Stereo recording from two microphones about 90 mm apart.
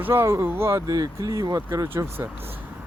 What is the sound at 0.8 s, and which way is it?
Speech, 45° right (ahead or behind).